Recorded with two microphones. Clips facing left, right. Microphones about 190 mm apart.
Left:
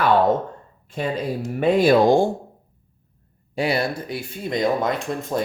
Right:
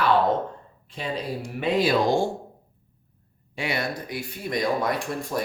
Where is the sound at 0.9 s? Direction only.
50° left (ahead or behind).